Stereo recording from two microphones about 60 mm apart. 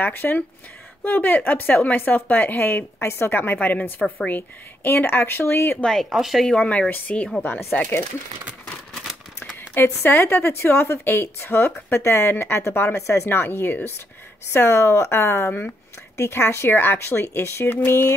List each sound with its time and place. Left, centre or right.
0.0 s speech: left
5.8 s speech: centre
6.0 s speech: centre
6.6 s speech: left
9.8 s a woman's voice: left
14.5 s a woman's voice: left
16.2 s a woman's voice: left